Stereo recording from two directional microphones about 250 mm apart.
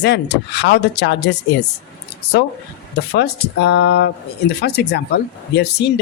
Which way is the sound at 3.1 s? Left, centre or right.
Left.